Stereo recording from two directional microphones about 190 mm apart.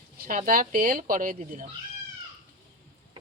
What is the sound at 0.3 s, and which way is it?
Speech, 45° right (ahead or behind).